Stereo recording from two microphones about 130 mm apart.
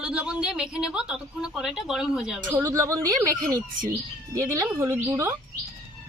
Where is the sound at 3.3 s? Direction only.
90° right.